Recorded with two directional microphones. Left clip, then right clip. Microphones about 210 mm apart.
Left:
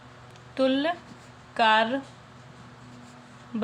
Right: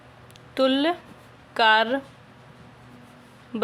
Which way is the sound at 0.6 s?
50° right (ahead or behind).